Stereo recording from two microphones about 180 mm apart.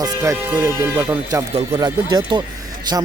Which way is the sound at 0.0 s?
20° right (ahead or behind).